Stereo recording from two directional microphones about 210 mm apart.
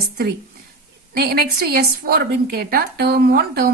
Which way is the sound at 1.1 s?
50° right (ahead or behind).